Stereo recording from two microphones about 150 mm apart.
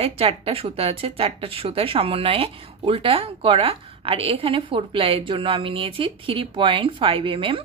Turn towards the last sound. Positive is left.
turn(degrees=-35)  # may be behind; listen again after turning